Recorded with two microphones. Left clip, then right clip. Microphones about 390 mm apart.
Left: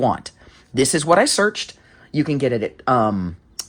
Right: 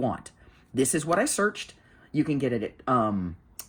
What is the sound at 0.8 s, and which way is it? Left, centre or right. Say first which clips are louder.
Speech: left 9 dB; centre.